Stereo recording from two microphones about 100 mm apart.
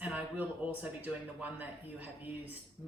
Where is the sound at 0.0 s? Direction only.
15° right (ahead or behind).